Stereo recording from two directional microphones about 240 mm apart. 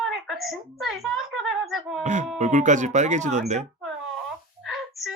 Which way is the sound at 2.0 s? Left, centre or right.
Right.